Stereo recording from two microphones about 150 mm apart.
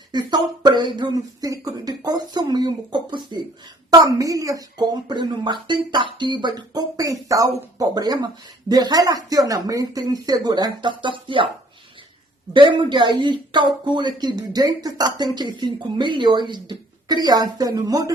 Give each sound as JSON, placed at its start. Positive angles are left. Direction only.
{"t": 0.1, "sound": "speech", "side_deg": -30}
{"t": 12.5, "sound": "speech", "side_deg": -30}